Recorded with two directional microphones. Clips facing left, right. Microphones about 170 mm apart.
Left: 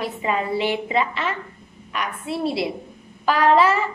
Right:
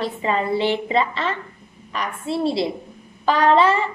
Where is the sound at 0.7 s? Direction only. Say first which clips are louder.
Right 2 dB; 5° left (ahead or behind).